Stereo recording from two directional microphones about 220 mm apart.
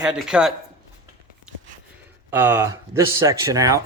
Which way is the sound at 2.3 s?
10° right (ahead or behind).